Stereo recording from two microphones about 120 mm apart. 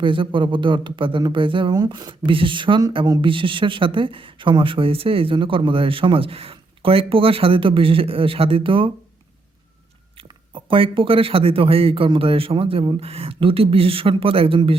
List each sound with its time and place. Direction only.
0.0 s speech: 45° right (ahead or behind)
10.2 s speech: 45° right (ahead or behind)